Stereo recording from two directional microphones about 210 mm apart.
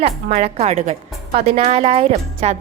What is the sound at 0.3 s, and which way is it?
A woman's voice, 30° right (ahead or behind).